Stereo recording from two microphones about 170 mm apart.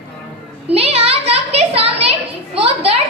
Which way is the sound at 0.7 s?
35° right (ahead or behind).